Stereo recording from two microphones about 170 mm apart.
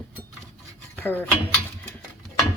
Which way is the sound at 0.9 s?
10° left (ahead or behind).